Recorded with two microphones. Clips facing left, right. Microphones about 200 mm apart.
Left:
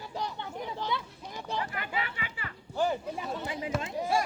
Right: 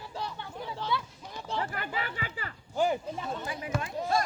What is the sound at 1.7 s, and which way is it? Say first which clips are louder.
Music: even; 40° right (ahead or behind).